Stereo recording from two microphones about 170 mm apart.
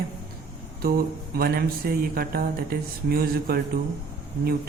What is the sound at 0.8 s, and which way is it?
Speech, 60° right (ahead or behind).